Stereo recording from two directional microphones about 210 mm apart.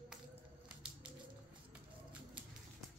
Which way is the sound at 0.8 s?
25° right (ahead or behind).